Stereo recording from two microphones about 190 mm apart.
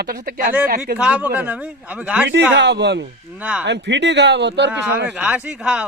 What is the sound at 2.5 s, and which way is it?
Speech, 65° right (ahead or behind).